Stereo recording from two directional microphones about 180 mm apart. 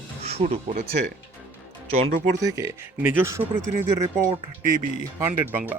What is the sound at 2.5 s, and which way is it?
Speech, 15° right (ahead or behind).